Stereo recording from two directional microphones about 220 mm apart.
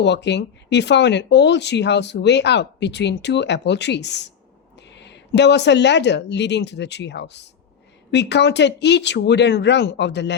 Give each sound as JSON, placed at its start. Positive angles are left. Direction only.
{"t": 0.0, "sound": "speech", "side_deg": 50}